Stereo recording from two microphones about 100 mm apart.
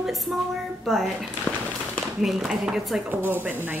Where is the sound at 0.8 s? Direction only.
Centre (ahead or behind).